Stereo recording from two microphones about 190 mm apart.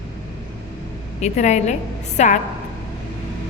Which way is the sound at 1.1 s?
35° left (ahead or behind).